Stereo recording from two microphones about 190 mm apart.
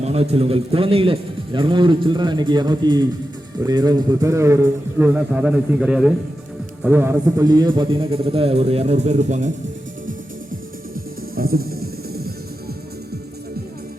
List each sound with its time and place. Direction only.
0.0 s a man's voice: 35° right (ahead or behind)
11.3 s music: 50° right (ahead or behind)